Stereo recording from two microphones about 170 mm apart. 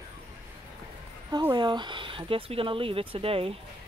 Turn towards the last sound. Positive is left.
turn(degrees=-35)  # may be behind; listen again after turning